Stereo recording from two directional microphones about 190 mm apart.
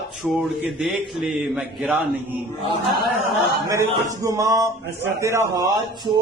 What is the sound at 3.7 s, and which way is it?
A man's voice, 15° right (ahead or behind).